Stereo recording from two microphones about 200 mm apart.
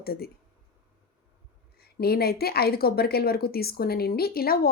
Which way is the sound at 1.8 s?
50° left (ahead or behind).